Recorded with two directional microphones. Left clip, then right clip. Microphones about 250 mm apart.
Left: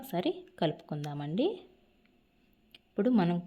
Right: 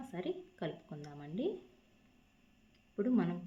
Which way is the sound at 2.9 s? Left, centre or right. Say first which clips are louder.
Left 6 dB; left.